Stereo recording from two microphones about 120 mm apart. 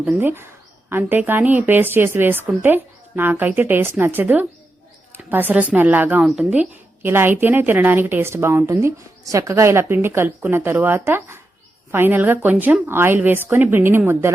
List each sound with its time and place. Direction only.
0.0 s a woman's voice: 15° right (ahead or behind)